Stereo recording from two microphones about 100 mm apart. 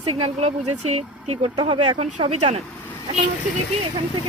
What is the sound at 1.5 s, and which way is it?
Speech, 60° right (ahead or behind).